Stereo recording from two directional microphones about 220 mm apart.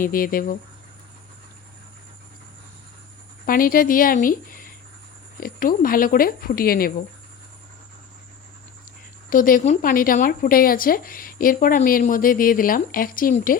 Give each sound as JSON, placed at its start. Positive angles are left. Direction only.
{"t": 0.0, "sound": "a woman's voice", "side_deg": 40}
{"t": 3.4, "sound": "a woman's voice", "side_deg": 40}
{"t": 9.3, "sound": "a woman's voice", "side_deg": 35}